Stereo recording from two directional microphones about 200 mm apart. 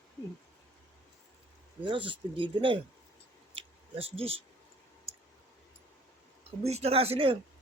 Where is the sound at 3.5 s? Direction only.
30° right (ahead or behind).